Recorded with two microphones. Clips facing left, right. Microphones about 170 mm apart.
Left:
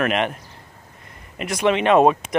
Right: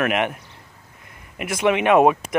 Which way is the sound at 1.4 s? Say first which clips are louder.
Even; 15° right (ahead or behind).